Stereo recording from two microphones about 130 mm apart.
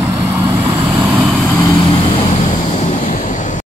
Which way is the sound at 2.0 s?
50° left (ahead or behind).